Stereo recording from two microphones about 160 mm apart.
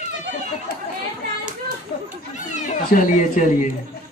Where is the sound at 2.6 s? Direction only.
55° left (ahead or behind).